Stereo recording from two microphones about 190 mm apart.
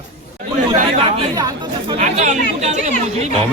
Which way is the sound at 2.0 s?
40° right (ahead or behind).